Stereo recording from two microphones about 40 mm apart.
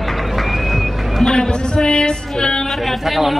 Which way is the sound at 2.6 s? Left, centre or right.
Centre.